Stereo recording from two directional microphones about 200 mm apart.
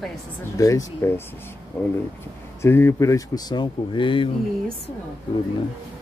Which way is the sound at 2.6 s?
10° left (ahead or behind).